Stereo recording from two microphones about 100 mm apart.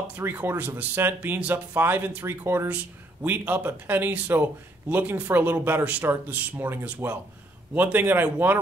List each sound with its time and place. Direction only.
0.1 s speech: 20° right (ahead or behind)